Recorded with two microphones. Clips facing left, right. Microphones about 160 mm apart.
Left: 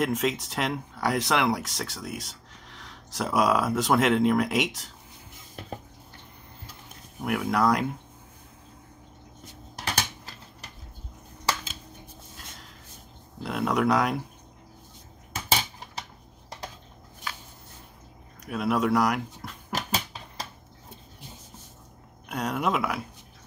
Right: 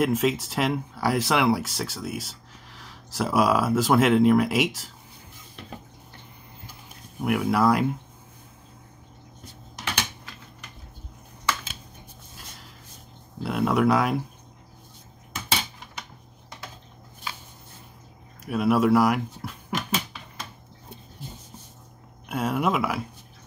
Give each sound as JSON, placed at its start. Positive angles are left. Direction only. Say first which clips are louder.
{"t": 0.0, "sound": "speech", "louder": "right 3 dB", "side_deg": -5}
{"t": 7.2, "sound": "speech", "louder": "right 3 dB", "side_deg": 0}
{"t": 9.8, "sound": "typing", "louder": "even", "side_deg": 35}
{"t": 13.4, "sound": "speech", "louder": "right 3 dB", "side_deg": 0}
{"t": 15.3, "sound": "a sound", "louder": "left 1 dB", "side_deg": 40}
{"t": 18.4, "sound": "speech", "louder": "right 4 dB", "side_deg": -5}
{"t": 19.7, "sound": "a sound", "louder": "right 2 dB", "side_deg": 35}
{"t": 22.3, "sound": "speech", "louder": "right 2 dB", "side_deg": -5}